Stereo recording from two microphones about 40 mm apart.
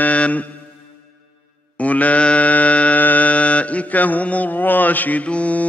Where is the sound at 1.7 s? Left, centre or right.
Left.